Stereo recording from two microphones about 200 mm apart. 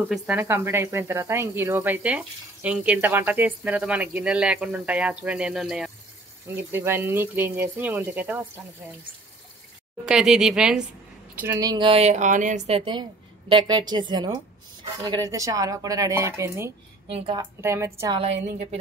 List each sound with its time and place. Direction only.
0.1 s speech: centre (ahead or behind)
0.5 s speech: 15° right (ahead or behind)
10.0 s speech: 5° right (ahead or behind)
17.1 s speech: 25° right (ahead or behind)
17.6 s speech: 15° right (ahead or behind)
18.2 s a woman's voice: 30° right (ahead or behind)